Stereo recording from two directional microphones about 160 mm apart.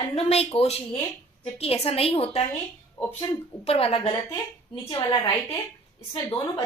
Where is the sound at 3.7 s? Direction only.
35° left (ahead or behind).